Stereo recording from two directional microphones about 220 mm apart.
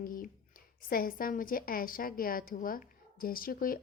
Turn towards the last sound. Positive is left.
turn(degrees=40)  # may be behind; listen again after turning